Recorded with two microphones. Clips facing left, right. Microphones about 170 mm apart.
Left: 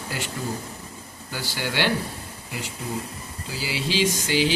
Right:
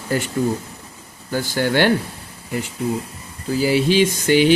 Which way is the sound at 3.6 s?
50° right (ahead or behind).